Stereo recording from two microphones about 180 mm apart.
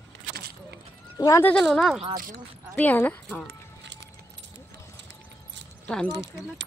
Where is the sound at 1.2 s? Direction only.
15° left (ahead or behind).